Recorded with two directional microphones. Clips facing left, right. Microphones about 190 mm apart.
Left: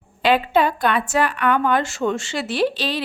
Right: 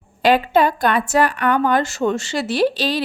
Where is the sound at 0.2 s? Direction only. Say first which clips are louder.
Right 2 dB; 40° right (ahead or behind).